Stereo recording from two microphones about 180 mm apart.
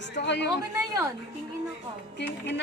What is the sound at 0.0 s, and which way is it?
Speech, 75° left (ahead or behind).